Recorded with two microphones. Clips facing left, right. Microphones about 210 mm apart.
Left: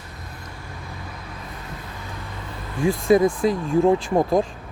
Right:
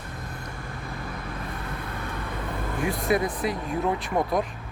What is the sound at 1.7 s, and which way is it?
Vehicle, 55° right (ahead or behind).